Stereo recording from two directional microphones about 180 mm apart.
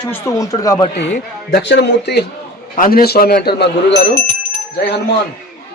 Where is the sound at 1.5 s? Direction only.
75° left (ahead or behind).